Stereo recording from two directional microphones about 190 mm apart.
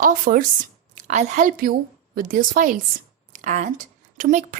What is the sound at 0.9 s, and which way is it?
A woman's voice, 40° right (ahead or behind).